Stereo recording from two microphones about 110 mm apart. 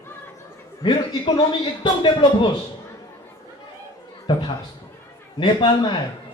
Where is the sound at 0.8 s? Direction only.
45° left (ahead or behind).